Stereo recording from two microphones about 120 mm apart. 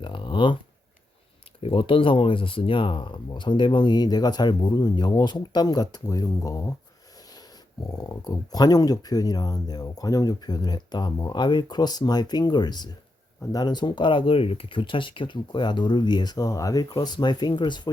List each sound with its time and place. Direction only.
0.0 s a sound: 40° left (ahead or behind)
1.6 s speech: 50° left (ahead or behind); by 6.7 s 25° left (ahead or behind)
7.9 s speech: 30° left (ahead or behind)